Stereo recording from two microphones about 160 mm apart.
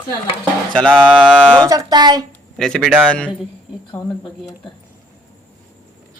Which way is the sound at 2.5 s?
5° left (ahead or behind).